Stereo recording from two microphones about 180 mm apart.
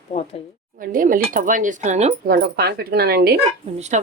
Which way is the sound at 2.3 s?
55° right (ahead or behind).